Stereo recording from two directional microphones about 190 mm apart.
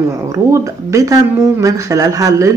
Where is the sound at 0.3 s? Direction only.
15° right (ahead or behind).